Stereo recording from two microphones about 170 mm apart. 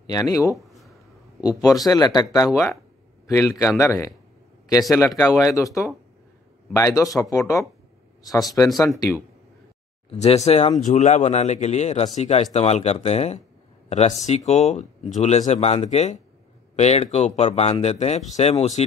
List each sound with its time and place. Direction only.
0.0 s speech: 20° left (ahead or behind)
0.6 s a sound: centre (ahead or behind)
1.4 s speech: 20° left (ahead or behind)
2.5 s speech: centre (ahead or behind)
3.3 s a man's voice: 20° left (ahead or behind)
10.0 s speech: 40° left (ahead or behind)